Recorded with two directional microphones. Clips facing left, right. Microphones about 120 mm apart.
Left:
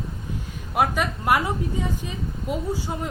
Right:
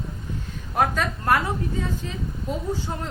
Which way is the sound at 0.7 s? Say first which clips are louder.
Even; 10° left (ahead or behind).